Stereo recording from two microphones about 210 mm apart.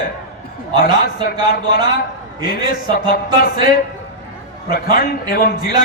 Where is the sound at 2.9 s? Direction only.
45° left (ahead or behind).